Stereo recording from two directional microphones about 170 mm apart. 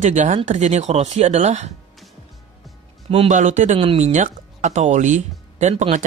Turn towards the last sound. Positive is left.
turn(degrees=-45)  # may be behind; listen again after turning